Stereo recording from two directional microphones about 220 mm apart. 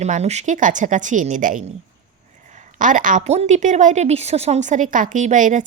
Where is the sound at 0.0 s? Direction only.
30° right (ahead or behind).